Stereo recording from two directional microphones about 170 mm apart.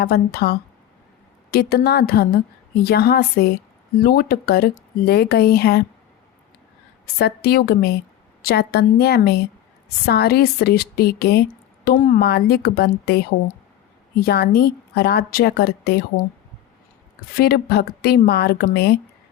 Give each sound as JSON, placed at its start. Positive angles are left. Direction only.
{"t": 0.0, "sound": "a woman's voice", "side_deg": 65}
{"t": 7.2, "sound": "a woman's voice", "side_deg": 70}
{"t": 11.9, "sound": "speech", "side_deg": 50}
{"t": 12.3, "sound": "a woman's voice", "side_deg": 70}
{"t": 17.3, "sound": "a woman's voice", "side_deg": 70}